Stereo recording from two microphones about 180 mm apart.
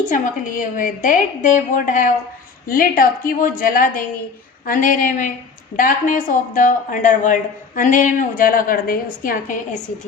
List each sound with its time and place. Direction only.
0.1 s a woman's voice: 45° left (ahead or behind)